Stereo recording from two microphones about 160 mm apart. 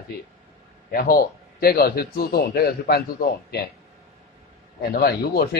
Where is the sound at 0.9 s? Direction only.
65° left (ahead or behind).